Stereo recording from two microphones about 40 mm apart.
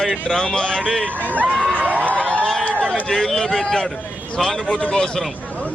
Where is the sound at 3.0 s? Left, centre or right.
Centre.